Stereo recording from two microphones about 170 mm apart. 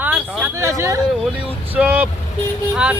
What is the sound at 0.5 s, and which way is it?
Speech, 15° right (ahead or behind).